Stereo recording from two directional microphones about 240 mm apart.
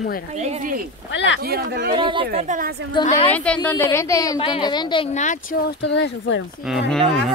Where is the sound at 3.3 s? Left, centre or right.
Centre; by 5.3 s left.